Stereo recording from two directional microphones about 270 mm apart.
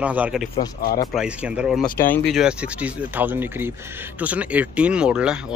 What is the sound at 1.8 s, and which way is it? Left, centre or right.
Speech, left.